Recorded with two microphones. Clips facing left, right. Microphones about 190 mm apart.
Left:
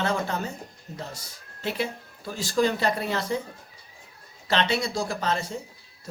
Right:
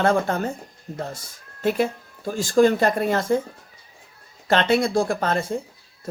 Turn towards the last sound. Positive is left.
turn(degrees=-55)  # may be behind; listen again after turning